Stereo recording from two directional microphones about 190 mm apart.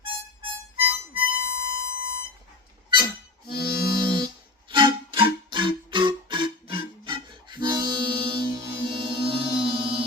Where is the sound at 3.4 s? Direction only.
55° left (ahead or behind).